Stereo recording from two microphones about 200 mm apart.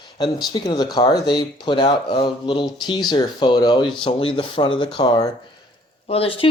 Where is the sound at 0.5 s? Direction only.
20° left (ahead or behind).